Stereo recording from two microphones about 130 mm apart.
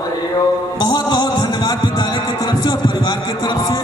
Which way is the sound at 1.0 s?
30° left (ahead or behind).